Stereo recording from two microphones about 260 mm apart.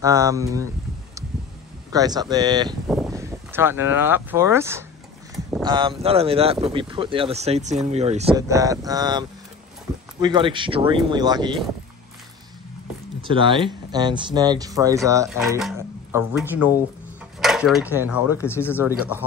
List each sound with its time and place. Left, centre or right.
0.0 s speech: centre
1.9 s speech: centre
8.4 s speech: centre
10.2 s speech: centre
13.2 s speech: centre
15.2 s speech: centre
18.4 s speech: centre
18.8 s speech: centre